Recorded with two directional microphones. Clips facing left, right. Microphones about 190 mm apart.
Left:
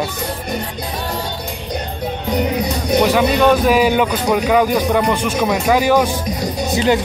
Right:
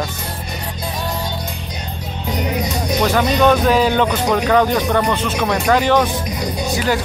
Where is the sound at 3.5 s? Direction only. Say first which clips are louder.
Left 1 dB; 10° left (ahead or behind).